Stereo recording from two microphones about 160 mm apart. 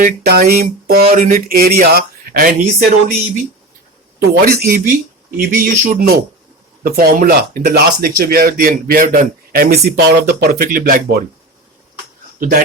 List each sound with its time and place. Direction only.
0.0 s speech: 65° right (ahead or behind)
4.2 s speech: 75° right (ahead or behind)
5.4 s speech: 60° right (ahead or behind)
12.4 s speech: 60° right (ahead or behind)